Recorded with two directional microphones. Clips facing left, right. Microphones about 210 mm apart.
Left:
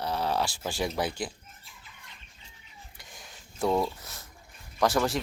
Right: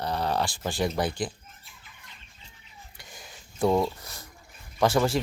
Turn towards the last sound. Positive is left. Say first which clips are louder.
# right 3 dB
turn(degrees=0)  # may be behind; listen again after turning